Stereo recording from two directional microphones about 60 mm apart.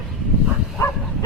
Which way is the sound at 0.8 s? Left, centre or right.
Left.